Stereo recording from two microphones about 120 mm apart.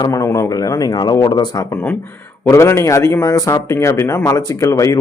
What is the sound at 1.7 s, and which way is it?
Speech, 15° left (ahead or behind).